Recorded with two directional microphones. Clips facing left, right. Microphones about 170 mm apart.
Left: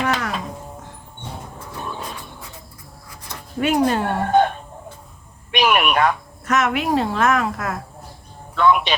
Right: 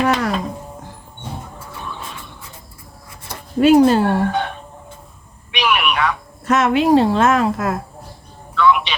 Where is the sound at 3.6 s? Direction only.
30° right (ahead or behind).